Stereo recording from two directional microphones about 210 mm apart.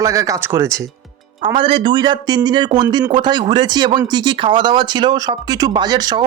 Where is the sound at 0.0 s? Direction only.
15° right (ahead or behind).